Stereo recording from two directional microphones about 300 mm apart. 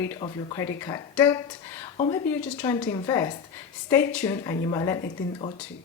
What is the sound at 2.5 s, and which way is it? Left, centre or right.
A woman's voice, centre.